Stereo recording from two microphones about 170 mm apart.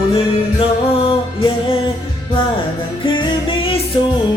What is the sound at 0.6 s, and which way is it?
Music, 30° left (ahead or behind).